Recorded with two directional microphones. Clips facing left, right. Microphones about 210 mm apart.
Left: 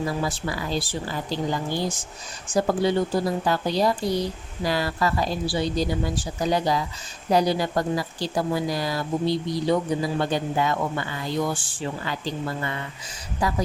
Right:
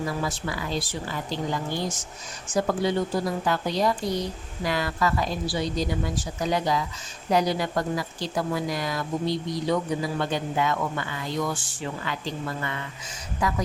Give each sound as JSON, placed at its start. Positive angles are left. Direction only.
{"t": 0.2, "sound": "speech", "side_deg": 35}